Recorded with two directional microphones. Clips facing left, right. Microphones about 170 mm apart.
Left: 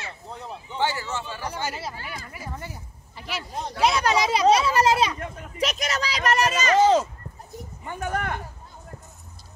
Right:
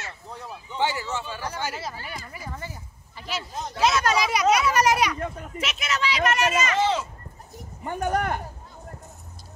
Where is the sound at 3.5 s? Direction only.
30° left (ahead or behind).